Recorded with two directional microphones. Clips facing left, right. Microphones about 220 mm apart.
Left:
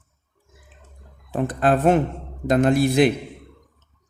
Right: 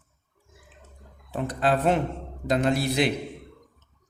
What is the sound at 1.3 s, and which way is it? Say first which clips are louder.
Speech: left 5 dB; 50° left (ahead or behind).